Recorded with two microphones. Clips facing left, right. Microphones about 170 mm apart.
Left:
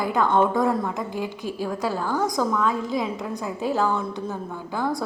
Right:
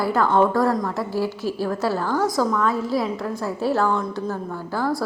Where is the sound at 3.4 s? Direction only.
15° left (ahead or behind).